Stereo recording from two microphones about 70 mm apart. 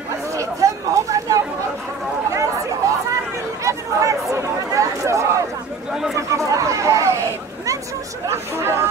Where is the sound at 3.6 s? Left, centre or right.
Right.